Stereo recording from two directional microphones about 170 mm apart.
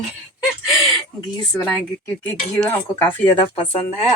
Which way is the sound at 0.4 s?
5° right (ahead or behind).